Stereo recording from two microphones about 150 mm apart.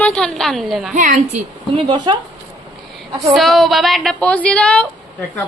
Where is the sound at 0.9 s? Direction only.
60° right (ahead or behind).